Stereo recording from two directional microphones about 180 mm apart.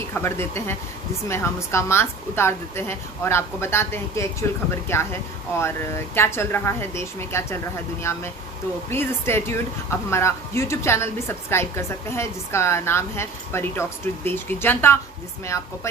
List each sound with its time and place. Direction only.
0.1 s speech: 15° left (ahead or behind)